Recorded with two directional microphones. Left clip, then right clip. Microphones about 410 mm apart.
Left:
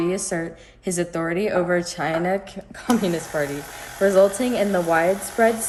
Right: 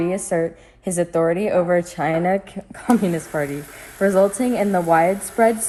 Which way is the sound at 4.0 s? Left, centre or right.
Centre.